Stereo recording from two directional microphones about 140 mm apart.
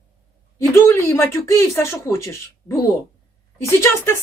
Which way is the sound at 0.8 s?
15° left (ahead or behind).